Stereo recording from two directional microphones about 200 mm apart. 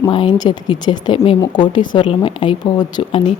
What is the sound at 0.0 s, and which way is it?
A woman's voice, 25° left (ahead or behind).